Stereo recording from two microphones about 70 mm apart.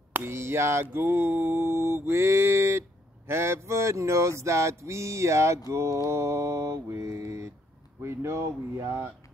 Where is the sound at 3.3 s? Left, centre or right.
Right.